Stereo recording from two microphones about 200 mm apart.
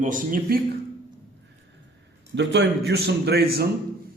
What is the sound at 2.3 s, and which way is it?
A man's voice, 60° right (ahead or behind).